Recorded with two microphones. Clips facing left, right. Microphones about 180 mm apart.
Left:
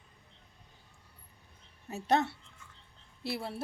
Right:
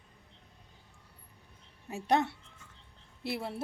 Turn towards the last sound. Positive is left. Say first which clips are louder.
# right 1 dB
turn(degrees=-20)  # may be behind; listen again after turning